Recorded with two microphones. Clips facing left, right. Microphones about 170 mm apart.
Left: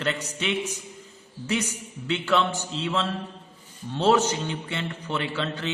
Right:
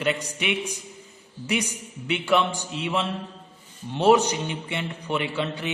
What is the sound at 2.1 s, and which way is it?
A man's voice, 15° right (ahead or behind).